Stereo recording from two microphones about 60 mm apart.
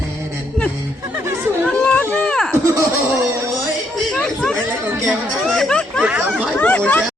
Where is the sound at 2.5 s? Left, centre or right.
Right.